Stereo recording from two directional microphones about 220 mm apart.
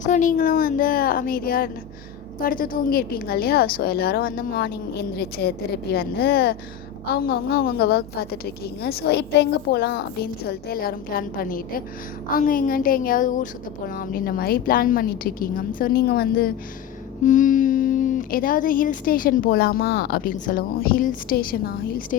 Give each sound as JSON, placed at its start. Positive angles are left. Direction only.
{"t": 0.0, "sound": "a woman's voice", "side_deg": 35}